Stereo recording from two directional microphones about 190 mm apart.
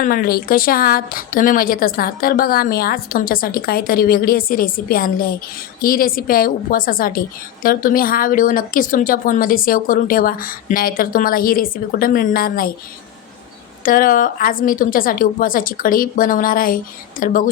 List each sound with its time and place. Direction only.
0.0 s a woman's voice: 50° left (ahead or behind)
13.8 s a woman's voice: 45° left (ahead or behind)